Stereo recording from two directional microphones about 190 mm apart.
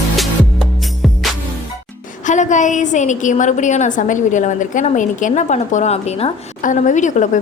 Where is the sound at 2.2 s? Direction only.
40° left (ahead or behind).